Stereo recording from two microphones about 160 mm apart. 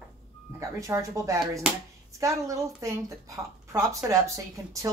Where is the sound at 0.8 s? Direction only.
20° right (ahead or behind).